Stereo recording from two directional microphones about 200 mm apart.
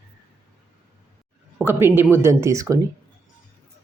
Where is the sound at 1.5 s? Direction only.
10° right (ahead or behind).